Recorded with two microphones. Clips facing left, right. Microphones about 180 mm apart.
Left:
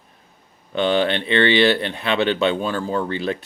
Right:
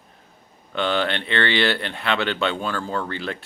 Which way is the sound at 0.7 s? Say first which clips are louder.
Left 4 dB; 15° left (ahead or behind).